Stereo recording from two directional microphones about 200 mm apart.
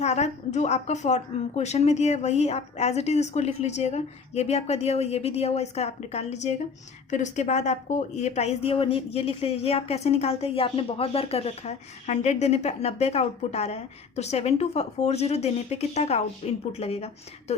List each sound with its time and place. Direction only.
0.0 s a woman's voice: 35° left (ahead or behind)